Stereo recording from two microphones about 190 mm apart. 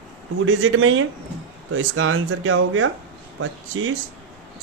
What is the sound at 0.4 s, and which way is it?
Speech, 90° right.